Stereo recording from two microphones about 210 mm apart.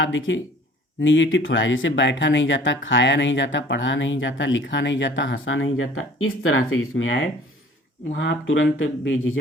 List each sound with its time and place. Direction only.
0.0 s speech: 65° left (ahead or behind)
8.1 s speech: 55° left (ahead or behind)